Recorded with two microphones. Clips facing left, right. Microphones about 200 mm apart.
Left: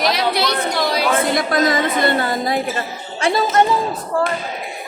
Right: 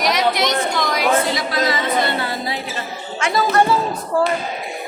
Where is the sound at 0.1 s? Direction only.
30° left (ahead or behind).